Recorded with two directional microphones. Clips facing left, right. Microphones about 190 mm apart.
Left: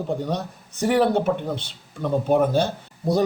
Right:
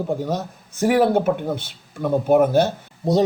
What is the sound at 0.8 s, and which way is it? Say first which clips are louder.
A man's voice: right 2 dB; 5° right (ahead or behind).